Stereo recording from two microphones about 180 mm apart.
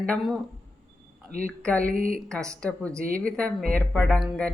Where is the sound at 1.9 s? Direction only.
50° right (ahead or behind).